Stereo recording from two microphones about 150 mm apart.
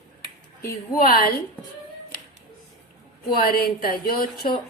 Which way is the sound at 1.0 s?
85° left.